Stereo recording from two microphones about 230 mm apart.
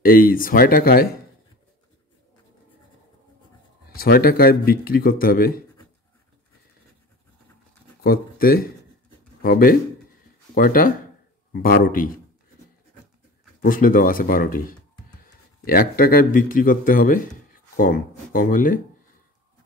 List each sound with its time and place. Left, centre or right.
0.0 s speech: left
3.9 s speech: left
8.0 s speech: left
13.6 s speech: left